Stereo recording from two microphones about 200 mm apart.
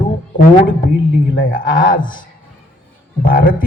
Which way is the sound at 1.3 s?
45° left (ahead or behind).